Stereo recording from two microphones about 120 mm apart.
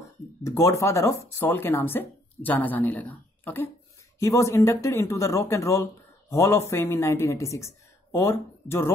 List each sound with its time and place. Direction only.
0.4 s a woman's voice: 25° left (ahead or behind)